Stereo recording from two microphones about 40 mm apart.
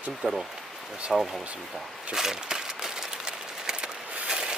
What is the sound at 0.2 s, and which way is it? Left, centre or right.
Speech, right.